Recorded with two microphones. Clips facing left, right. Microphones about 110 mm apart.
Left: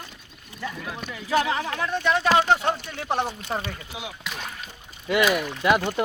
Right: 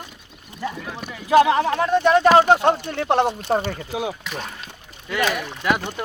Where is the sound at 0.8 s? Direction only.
Centre (ahead or behind).